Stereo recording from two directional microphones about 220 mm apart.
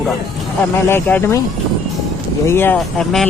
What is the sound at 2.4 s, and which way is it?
Speech, 10° left (ahead or behind).